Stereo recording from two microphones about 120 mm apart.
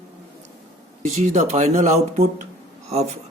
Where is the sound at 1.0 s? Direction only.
85° right.